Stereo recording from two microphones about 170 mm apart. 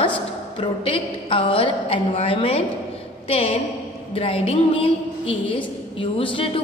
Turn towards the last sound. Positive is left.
turn(degrees=30)  # may be behind; listen again after turning